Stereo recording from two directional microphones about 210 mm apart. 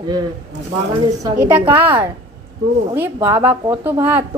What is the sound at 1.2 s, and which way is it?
Speech, 10° right (ahead or behind).